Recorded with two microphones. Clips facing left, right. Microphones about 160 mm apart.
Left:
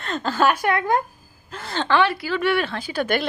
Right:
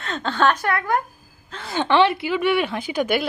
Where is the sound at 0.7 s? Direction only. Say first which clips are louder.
Left 1 dB; 20° left (ahead or behind).